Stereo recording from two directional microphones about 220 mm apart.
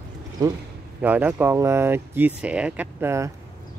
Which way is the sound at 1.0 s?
5° right (ahead or behind).